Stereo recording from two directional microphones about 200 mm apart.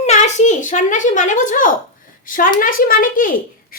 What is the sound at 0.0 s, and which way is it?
A child's voice, 35° left (ahead or behind).